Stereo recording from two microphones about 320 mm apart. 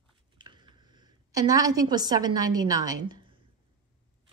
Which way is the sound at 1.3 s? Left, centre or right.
Centre.